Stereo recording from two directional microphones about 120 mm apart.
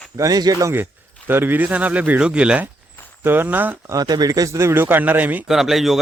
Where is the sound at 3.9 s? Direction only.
35° right (ahead or behind); by 5.4 s 15° right (ahead or behind).